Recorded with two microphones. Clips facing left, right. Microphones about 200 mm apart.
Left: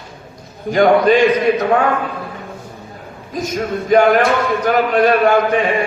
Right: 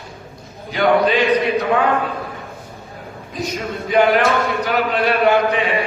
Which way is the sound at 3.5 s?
45° left (ahead or behind).